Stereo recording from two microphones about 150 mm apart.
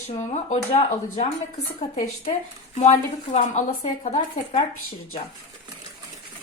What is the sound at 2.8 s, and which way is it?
Speech, 50° left (ahead or behind).